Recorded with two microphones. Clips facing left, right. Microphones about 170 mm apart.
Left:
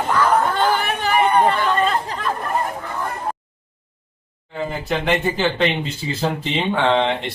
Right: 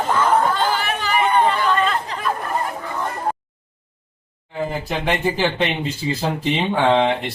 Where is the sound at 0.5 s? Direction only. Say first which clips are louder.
Left 2 dB; 55° left (ahead or behind).